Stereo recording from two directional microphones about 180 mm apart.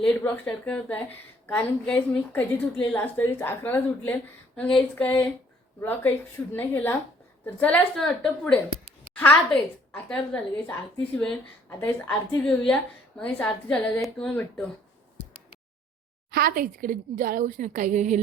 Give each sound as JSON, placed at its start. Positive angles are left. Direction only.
{"t": 0.0, "sound": "a woman's voice", "side_deg": 5}
{"t": 11.8, "sound": "a woman's voice", "side_deg": 5}
{"t": 16.3, "sound": "a woman's voice", "side_deg": -55}